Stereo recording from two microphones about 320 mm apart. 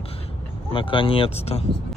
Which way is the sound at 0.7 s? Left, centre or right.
Centre.